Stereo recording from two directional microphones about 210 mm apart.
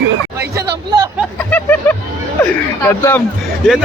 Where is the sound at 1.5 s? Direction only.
10° left (ahead or behind).